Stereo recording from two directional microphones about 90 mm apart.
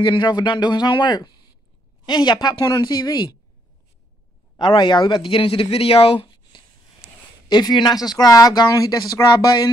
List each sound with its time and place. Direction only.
0.0 s speech: 55° left (ahead or behind)
4.6 s speech: 60° left (ahead or behind)
7.4 s speech: 50° left (ahead or behind)